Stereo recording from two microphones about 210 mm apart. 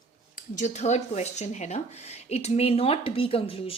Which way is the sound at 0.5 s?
35° left (ahead or behind).